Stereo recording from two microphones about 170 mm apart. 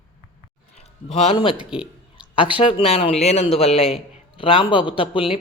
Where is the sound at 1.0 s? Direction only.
35° left (ahead or behind).